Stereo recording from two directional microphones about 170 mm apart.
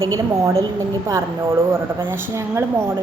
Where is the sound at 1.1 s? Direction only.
15° right (ahead or behind).